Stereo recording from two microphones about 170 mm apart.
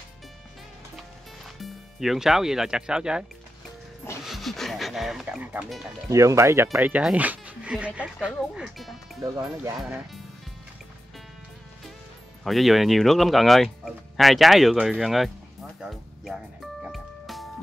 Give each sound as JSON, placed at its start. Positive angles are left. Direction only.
{"t": 0.9, "sound": "music", "side_deg": 0}
{"t": 6.0, "sound": "speech", "side_deg": -20}
{"t": 9.2, "sound": "speech", "side_deg": -20}
{"t": 9.8, "sound": "speech", "side_deg": 0}
{"t": 12.4, "sound": "speech", "side_deg": 0}
{"t": 16.8, "sound": "music", "side_deg": 0}